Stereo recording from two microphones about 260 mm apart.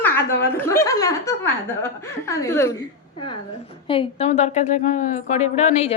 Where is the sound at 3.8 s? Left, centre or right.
Centre.